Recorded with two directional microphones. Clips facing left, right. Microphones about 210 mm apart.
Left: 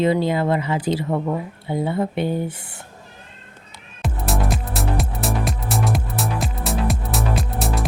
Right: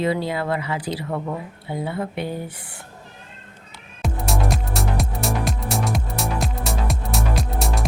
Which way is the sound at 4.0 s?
Centre (ahead or behind).